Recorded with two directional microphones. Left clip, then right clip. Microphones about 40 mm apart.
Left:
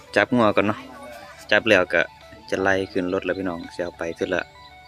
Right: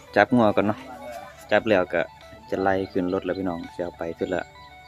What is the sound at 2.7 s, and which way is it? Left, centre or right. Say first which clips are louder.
Speech: left 2 dB; right.